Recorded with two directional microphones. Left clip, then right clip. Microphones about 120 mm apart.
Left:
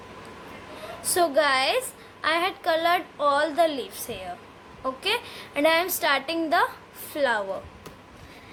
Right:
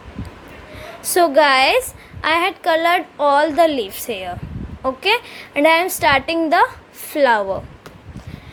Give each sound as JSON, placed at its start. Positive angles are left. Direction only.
{"t": 1.1, "sound": "a woman's voice", "side_deg": -55}
{"t": 2.2, "sound": "a woman's voice", "side_deg": -50}